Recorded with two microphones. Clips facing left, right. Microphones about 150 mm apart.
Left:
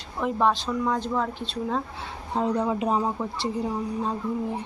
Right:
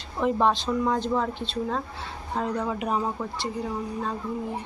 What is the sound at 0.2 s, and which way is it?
Speech, centre (ahead or behind).